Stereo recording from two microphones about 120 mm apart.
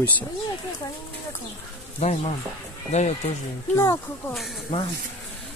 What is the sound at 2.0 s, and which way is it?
Speech, 70° left (ahead or behind).